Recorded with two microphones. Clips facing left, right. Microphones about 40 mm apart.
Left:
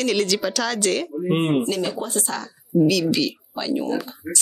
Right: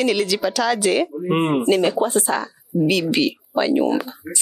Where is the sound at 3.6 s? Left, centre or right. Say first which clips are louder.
Right 6 dB; right.